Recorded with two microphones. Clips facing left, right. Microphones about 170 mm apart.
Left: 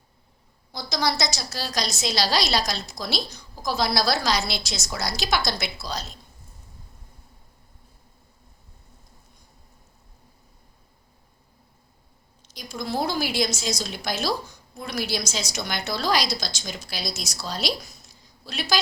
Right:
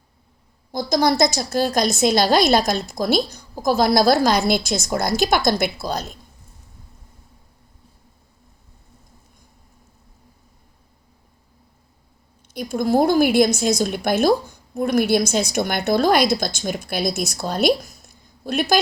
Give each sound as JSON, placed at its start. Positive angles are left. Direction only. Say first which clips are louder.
{"t": 0.7, "sound": "a woman's voice", "louder": "right 8 dB", "side_deg": -50}
{"t": 12.5, "sound": "a woman's voice", "louder": "right 10 dB", "side_deg": -55}